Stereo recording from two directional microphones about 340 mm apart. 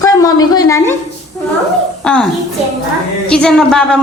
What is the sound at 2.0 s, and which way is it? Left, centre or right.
Speech, centre.